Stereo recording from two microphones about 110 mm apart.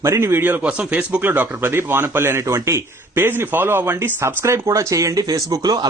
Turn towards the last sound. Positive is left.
turn(degrees=-35)  # may be behind; listen again after turning